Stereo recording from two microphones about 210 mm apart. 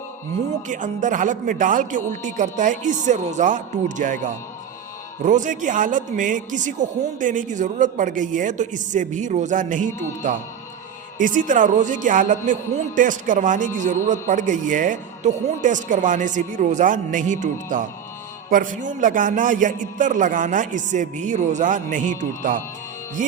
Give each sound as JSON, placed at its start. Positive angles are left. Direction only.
{"t": 0.7, "sound": "a man's voice", "side_deg": -40}